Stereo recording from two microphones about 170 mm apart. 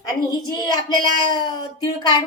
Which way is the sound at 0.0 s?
20° left (ahead or behind).